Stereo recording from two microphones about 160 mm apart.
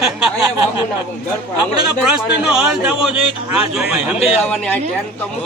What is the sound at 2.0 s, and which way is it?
A man's voice, 5° right (ahead or behind).